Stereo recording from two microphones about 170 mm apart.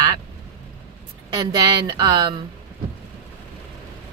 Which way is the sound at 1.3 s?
25° right (ahead or behind).